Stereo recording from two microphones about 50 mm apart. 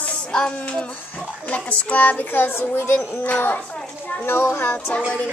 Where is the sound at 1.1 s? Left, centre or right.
Left.